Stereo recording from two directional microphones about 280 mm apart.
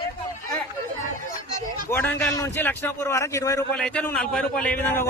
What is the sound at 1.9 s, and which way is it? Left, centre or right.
A man's voice, centre.